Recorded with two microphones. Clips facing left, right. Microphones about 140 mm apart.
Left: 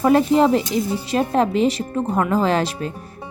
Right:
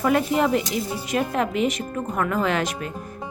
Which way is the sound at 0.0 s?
30° left (ahead or behind).